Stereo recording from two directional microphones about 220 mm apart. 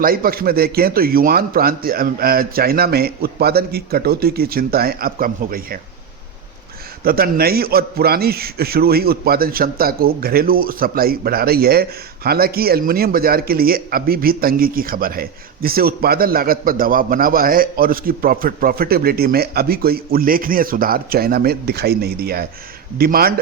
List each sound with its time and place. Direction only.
0.0 s a man's voice: 40° right (ahead or behind)
7.0 s a man's voice: 40° right (ahead or behind)